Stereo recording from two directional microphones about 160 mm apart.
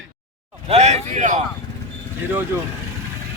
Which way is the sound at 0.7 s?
45° right (ahead or behind).